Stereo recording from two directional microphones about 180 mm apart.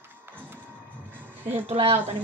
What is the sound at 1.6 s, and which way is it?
Speech, 30° right (ahead or behind).